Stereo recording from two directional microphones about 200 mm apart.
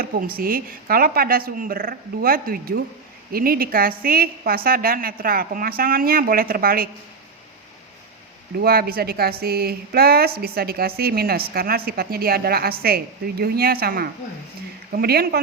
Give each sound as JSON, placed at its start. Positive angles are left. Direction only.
{"t": 0.0, "sound": "a woman's voice", "side_deg": -45}
{"t": 8.6, "sound": "a woman's voice", "side_deg": -50}